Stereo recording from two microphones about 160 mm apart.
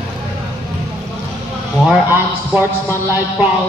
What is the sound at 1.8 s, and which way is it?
A man's voice, 10° right (ahead or behind).